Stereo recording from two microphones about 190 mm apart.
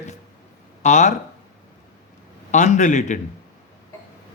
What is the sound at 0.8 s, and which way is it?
Speech, 40° left (ahead or behind).